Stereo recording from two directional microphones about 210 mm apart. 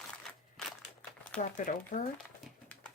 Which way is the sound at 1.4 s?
40° left (ahead or behind).